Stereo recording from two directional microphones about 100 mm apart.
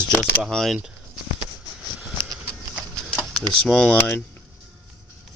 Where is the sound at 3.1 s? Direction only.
10° left (ahead or behind).